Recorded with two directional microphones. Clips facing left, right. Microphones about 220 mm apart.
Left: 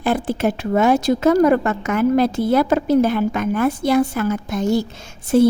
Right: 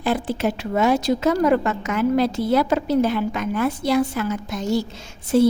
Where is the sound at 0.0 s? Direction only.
50° left (ahead or behind).